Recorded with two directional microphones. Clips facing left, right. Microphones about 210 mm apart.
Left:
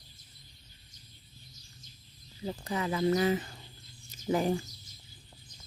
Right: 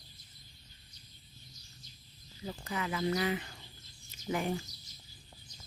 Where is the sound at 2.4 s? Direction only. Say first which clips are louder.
Left 4 dB; 30° left (ahead or behind).